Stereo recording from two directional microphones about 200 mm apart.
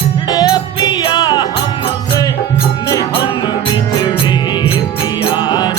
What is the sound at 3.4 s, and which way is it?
Music, 20° left (ahead or behind).